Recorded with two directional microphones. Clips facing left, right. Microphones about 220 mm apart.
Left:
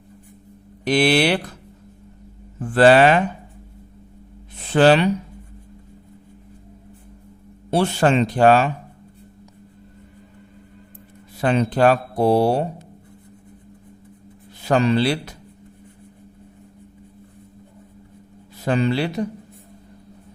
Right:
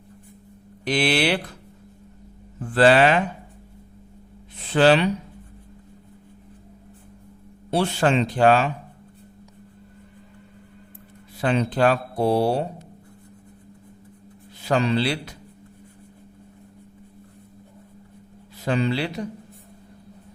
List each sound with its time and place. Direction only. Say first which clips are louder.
0.9 s speech: left 4 dB; 45° left (ahead or behind)
2.7 s speech: left 3 dB; 45° left (ahead or behind)
4.7 s speech: left 2 dB; 50° left (ahead or behind)
7.7 s speech: left 3 dB; 45° left (ahead or behind)
11.3 s speech: left 3 dB; 45° left (ahead or behind)
14.7 s speech: left 4 dB; 50° left (ahead or behind)
18.6 s speech: left 3 dB; 45° left (ahead or behind)